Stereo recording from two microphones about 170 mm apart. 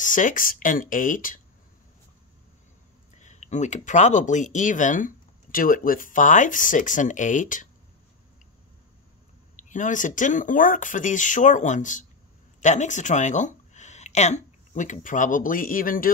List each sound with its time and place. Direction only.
0.0 s speech: 50° left (ahead or behind)
3.2 s speech: 45° left (ahead or behind)
9.7 s speech: 50° left (ahead or behind)